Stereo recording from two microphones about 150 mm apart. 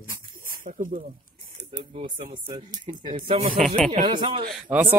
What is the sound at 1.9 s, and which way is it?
Speech, 40° right (ahead or behind).